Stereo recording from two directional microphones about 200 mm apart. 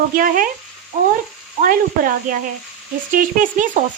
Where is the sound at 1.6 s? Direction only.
45° right (ahead or behind).